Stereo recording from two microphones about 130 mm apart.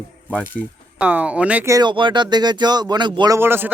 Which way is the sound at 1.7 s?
30° right (ahead or behind).